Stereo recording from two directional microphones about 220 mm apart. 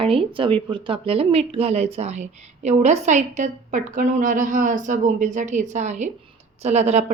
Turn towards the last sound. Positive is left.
turn(degrees=-30)  # may be behind; listen again after turning